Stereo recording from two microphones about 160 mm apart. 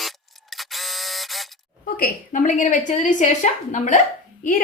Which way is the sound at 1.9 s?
60° left (ahead or behind).